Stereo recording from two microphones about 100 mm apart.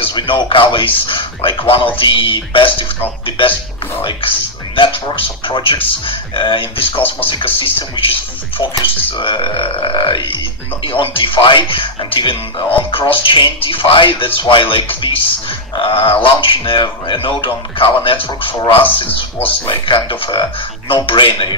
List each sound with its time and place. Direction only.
0.0 s speech: 55° left (ahead or behind)
9.2 s speech: 60° left (ahead or behind)